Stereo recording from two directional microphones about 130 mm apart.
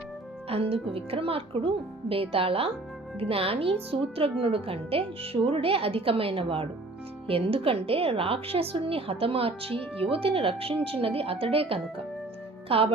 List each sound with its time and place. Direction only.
0.4 s a woman's voice: 50° right (ahead or behind)